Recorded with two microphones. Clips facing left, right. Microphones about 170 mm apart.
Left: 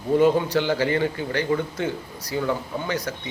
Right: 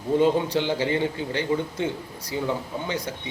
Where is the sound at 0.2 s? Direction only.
25° right (ahead or behind).